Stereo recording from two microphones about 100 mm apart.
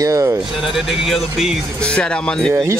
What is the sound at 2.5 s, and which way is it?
Speech, 30° right (ahead or behind).